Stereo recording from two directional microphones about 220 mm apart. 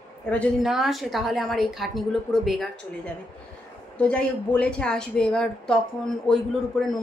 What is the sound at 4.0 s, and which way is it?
Speech, 5° left (ahead or behind).